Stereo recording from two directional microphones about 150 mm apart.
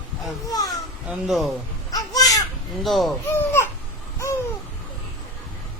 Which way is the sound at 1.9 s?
25° left (ahead or behind).